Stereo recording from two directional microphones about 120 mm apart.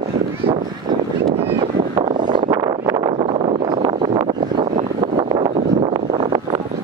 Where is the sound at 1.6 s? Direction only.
50° right (ahead or behind).